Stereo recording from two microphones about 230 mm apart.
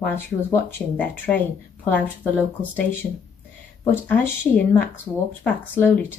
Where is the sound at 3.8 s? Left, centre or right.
Centre.